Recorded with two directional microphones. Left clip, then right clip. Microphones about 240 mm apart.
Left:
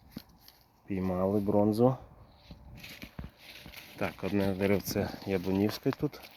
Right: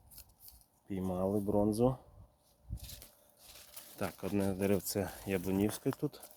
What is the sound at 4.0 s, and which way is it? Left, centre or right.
Speech, centre.